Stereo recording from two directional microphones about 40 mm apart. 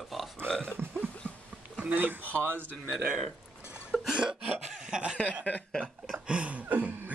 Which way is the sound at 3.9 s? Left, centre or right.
Left.